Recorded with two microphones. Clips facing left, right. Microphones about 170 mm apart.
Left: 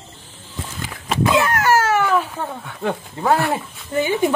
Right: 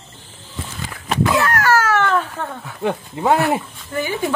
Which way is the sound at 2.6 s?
Centre (ahead or behind).